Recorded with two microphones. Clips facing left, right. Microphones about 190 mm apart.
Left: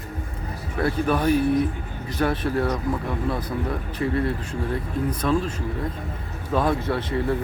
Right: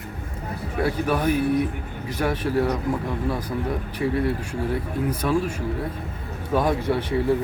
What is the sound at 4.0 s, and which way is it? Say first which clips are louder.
Speech: right 1 dB; 10° right (ahead or behind).